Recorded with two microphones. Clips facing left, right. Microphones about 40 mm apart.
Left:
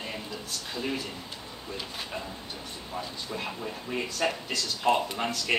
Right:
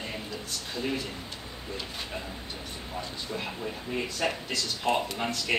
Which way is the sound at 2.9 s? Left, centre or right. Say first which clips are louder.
Even; centre.